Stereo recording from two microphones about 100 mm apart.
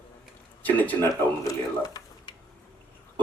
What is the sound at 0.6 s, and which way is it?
Speech, 15° left (ahead or behind).